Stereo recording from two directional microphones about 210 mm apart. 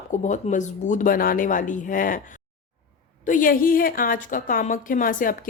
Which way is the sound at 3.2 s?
40° left (ahead or behind).